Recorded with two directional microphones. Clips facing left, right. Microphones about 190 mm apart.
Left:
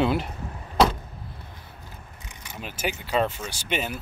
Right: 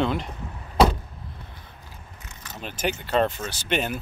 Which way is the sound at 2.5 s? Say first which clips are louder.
Right 2 dB; 5° left (ahead or behind).